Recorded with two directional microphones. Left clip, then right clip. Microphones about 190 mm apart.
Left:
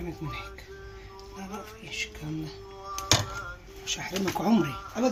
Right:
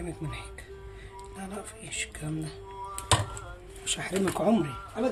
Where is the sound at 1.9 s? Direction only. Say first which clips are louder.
Left 1 dB; 25° right (ahead or behind).